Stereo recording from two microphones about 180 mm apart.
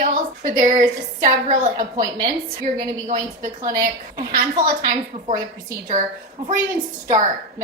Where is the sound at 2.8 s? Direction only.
45° right (ahead or behind).